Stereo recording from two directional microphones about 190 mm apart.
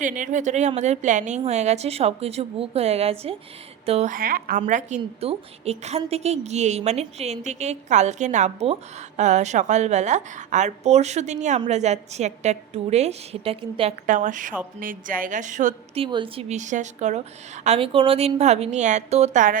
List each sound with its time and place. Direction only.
0.0 s a woman's voice: 40° right (ahead or behind)
4.6 s a woman's voice: 35° right (ahead or behind)
14.1 s a woman's voice: 40° right (ahead or behind)
16.0 s a woman's voice: 25° right (ahead or behind); by 19.5 s 40° right (ahead or behind)